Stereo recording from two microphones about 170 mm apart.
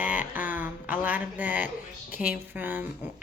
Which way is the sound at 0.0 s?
10° right (ahead or behind).